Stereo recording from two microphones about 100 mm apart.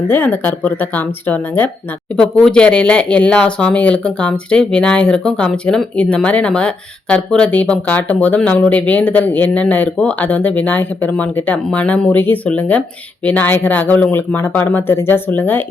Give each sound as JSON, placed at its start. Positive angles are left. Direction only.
{"t": 0.1, "sound": "speech", "side_deg": 20}
{"t": 2.1, "sound": "speech", "side_deg": 5}